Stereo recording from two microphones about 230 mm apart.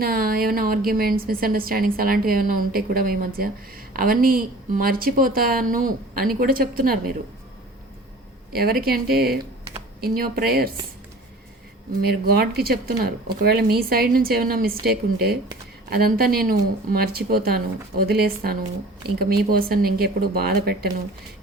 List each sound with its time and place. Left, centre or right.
0.0 s a woman's voice: right
8.8 s a woman's voice: right
12.0 s a woman's voice: right